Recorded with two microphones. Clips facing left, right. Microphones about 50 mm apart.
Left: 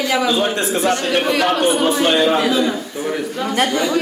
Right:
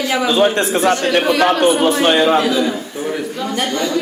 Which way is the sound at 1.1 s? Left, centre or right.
Centre.